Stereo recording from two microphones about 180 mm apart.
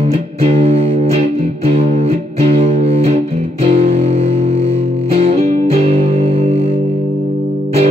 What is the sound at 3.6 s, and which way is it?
Music, 35° right (ahead or behind).